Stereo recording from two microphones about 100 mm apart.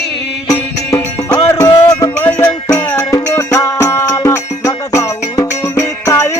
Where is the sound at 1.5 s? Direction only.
30° left (ahead or behind).